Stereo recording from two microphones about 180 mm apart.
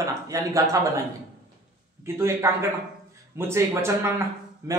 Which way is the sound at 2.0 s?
15° right (ahead or behind).